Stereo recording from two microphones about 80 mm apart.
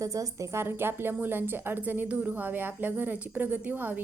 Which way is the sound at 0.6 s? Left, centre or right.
Right.